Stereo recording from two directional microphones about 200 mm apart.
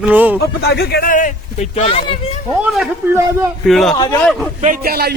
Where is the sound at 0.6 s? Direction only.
50° left (ahead or behind); by 2.4 s 30° left (ahead or behind).